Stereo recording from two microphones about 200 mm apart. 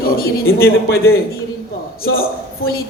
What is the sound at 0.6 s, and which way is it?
Speech, 50° left (ahead or behind).